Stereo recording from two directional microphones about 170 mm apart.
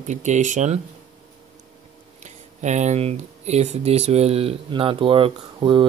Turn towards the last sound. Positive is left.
turn(degrees=-30)  # may be behind; listen again after turning